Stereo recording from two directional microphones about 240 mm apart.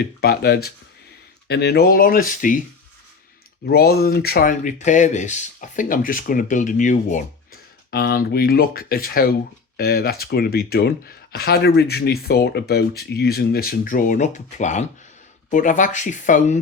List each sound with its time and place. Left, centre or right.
0.2 s speech: left
3.7 s speech: left